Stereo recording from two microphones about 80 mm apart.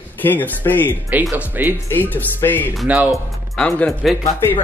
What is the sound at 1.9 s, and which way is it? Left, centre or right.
Speech, left.